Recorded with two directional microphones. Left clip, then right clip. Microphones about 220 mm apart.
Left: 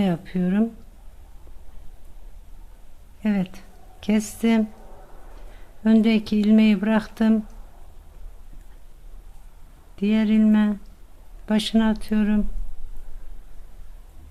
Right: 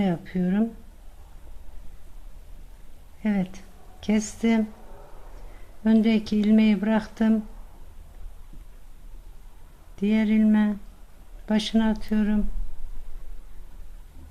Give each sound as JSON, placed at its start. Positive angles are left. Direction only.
{"t": 0.0, "sound": "speech", "side_deg": 10}
{"t": 3.2, "sound": "speech", "side_deg": 10}
{"t": 5.8, "sound": "speech", "side_deg": 10}
{"t": 9.9, "sound": "speech", "side_deg": 10}